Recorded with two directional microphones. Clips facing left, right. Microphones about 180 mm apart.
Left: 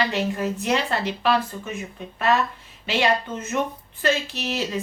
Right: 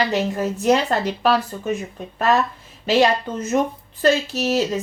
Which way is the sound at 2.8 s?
40° right (ahead or behind).